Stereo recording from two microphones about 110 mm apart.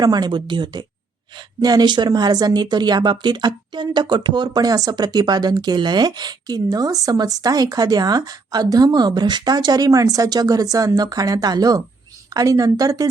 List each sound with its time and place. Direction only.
0.0 s speech: 40° right (ahead or behind)